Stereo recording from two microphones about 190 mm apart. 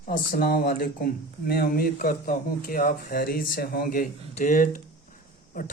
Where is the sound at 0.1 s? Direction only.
50° left (ahead or behind).